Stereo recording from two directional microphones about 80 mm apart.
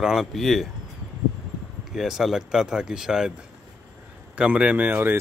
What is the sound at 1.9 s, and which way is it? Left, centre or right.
Speech, centre.